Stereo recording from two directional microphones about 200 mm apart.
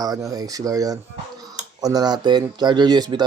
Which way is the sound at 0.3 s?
15° right (ahead or behind).